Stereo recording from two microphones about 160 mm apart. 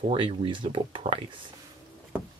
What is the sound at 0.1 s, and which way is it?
Speech, 35° right (ahead or behind).